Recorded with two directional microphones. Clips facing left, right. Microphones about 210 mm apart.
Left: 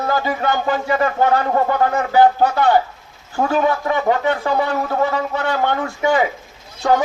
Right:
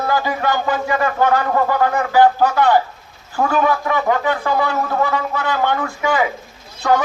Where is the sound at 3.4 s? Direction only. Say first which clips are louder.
Even; 30° left (ahead or behind).